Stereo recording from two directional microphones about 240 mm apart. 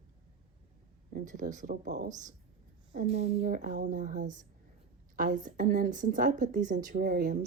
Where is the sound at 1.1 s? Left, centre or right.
Right.